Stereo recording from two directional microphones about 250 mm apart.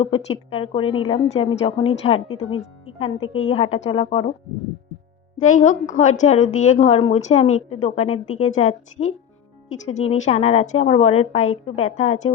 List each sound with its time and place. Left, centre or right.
0.0 s a woman's voice: left
2.2 s speech: left
2.6 s a woman's voice: left
5.4 s a woman's voice: left